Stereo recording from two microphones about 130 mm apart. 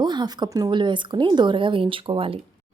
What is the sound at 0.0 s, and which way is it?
A woman's voice, 35° right (ahead or behind).